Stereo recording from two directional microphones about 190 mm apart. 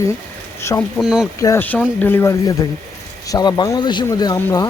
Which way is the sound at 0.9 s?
5° right (ahead or behind).